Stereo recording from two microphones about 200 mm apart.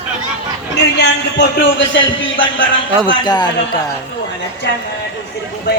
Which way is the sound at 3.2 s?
20° left (ahead or behind).